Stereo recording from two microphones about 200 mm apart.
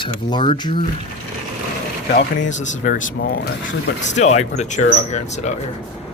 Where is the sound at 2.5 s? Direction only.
40° left (ahead or behind).